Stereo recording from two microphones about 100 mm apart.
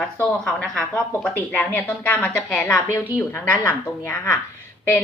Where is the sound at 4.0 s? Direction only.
20° left (ahead or behind).